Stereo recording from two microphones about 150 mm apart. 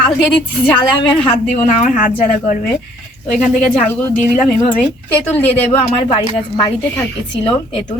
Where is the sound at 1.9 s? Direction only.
60° left (ahead or behind).